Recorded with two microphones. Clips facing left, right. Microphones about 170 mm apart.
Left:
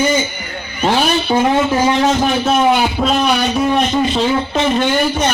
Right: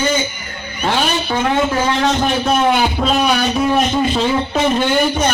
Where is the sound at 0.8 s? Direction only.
20° left (ahead or behind).